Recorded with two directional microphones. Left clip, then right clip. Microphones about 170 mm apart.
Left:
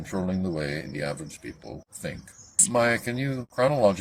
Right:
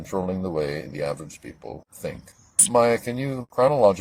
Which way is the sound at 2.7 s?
15° right (ahead or behind).